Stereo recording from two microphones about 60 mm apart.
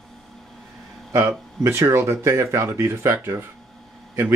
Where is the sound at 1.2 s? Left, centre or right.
Right.